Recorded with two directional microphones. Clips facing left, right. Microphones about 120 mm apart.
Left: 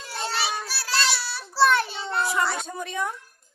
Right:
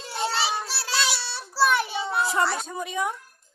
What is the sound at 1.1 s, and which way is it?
Child singing, 25° right (ahead or behind).